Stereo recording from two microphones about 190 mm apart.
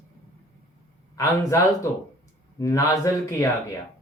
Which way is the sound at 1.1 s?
15° left (ahead or behind).